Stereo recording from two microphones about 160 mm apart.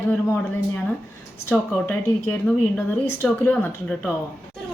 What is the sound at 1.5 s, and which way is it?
Speech, 15° left (ahead or behind).